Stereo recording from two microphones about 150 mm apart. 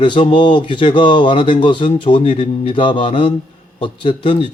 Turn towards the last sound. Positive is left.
turn(degrees=35)  # may be behind; listen again after turning